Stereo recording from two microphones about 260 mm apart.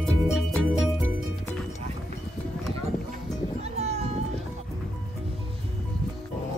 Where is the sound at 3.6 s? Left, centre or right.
Right.